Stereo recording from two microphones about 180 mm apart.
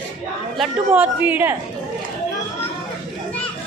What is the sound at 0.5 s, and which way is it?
A man's voice, 10° right (ahead or behind).